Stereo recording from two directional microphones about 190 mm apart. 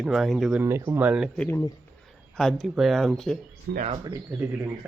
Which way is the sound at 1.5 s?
15° left (ahead or behind).